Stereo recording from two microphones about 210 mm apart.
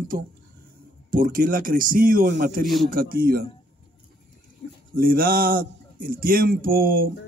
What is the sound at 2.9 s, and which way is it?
Speech, 40° right (ahead or behind).